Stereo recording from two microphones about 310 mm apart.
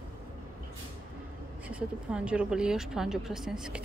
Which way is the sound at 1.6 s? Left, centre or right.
Centre.